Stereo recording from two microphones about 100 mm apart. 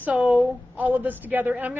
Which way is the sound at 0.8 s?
15° right (ahead or behind).